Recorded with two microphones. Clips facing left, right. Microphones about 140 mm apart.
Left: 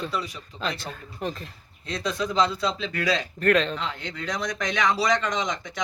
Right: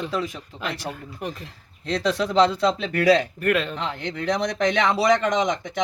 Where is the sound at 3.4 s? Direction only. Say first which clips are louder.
Left 1 dB; 10° right (ahead or behind).